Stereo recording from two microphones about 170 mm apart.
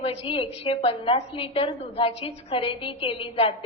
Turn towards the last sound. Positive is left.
turn(degrees=30)  # may be behind; listen again after turning